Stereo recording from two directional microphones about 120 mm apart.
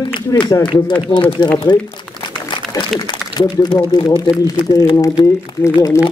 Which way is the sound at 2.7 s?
35° left (ahead or behind).